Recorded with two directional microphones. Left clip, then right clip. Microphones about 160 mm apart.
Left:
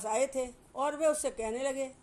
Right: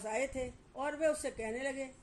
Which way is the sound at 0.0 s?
25° left (ahead or behind).